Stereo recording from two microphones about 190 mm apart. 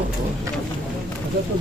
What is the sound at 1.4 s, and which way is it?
Speech, 60° right (ahead or behind).